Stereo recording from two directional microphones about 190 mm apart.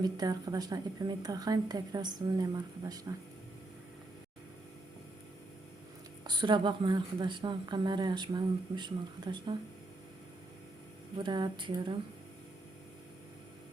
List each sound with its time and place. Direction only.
0.0 s a woman's voice: 20° right (ahead or behind)
6.2 s a woman's voice: 25° right (ahead or behind)
11.2 s a woman's voice: 25° right (ahead or behind)